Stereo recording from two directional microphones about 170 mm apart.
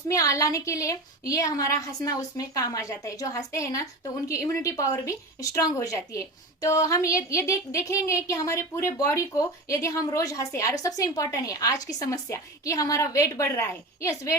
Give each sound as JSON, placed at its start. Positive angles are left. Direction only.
{"t": 0.1, "sound": "a woman's voice", "side_deg": 20}